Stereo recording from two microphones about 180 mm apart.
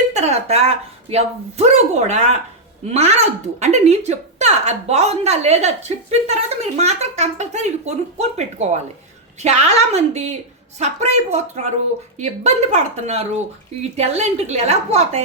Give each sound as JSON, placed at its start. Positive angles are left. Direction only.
{"t": 0.1, "sound": "speech", "side_deg": -35}